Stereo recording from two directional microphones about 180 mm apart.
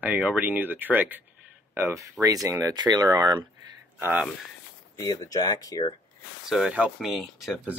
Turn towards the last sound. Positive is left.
turn(degrees=-5)  # may be behind; listen again after turning